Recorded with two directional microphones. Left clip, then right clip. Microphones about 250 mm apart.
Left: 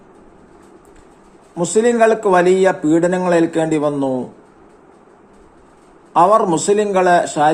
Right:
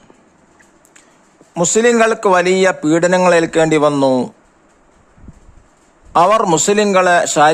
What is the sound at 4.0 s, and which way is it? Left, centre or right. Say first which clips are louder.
Speech: right 6 dB; right.